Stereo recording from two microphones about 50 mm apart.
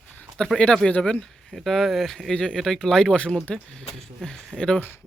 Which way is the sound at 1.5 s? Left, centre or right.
Centre.